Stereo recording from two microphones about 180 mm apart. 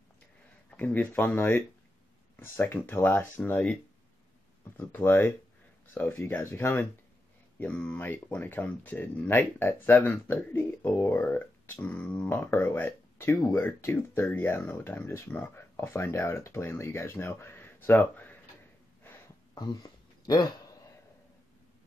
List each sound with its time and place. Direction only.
0.7 s speech: 10° left (ahead or behind)
4.7 s speech: 10° left (ahead or behind)
19.0 s a sound: 20° left (ahead or behind)